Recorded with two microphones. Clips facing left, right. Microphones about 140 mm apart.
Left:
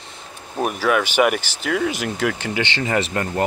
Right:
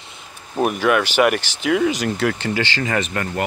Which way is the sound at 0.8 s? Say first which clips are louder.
Even; 5° left (ahead or behind).